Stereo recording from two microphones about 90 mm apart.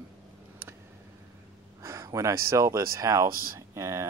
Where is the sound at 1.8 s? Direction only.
35° right (ahead or behind).